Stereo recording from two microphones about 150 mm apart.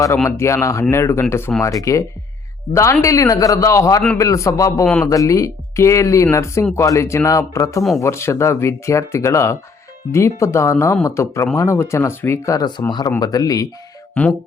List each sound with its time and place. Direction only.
0.3 s speech: 20° left (ahead or behind)
14.1 s speech: 5° left (ahead or behind)